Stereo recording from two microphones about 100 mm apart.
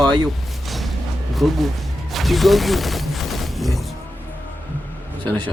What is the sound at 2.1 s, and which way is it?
Music, centre (ahead or behind).